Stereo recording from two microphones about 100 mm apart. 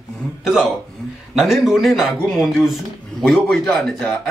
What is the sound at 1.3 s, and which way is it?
A man's voice, 5° right (ahead or behind).